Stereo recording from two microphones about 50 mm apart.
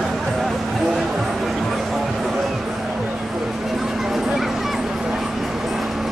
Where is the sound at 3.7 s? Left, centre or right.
Centre.